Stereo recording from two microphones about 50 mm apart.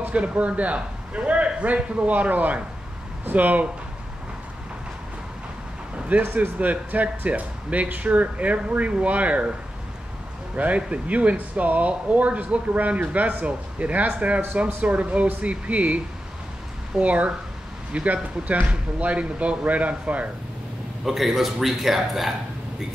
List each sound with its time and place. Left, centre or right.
0.0 s speech: right
6.1 s speech: right
10.5 s speech: right
17.0 s speech: right
21.0 s a man's voice: centre